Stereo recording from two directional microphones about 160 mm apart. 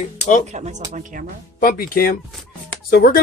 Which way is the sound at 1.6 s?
65° left (ahead or behind).